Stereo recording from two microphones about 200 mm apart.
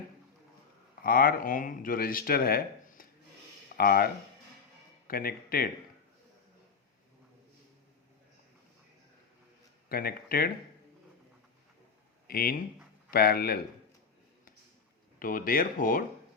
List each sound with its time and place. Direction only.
1.0 s speech: 45° left (ahead or behind)
9.9 s speech: 50° left (ahead or behind)
12.3 s speech: 50° left (ahead or behind)
15.2 s speech: 45° left (ahead or behind)